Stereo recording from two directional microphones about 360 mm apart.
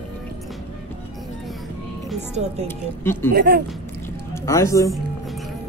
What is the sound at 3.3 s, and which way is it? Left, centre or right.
Speech, right.